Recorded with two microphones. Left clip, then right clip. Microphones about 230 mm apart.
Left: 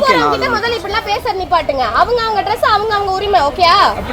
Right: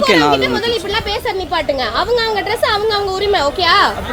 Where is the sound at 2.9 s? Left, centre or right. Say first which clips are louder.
Left 2 dB; right.